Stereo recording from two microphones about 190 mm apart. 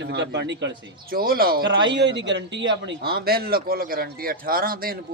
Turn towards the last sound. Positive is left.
turn(degrees=-50)  # may be behind; listen again after turning